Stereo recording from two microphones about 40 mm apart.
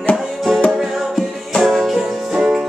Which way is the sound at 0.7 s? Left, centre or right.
Centre.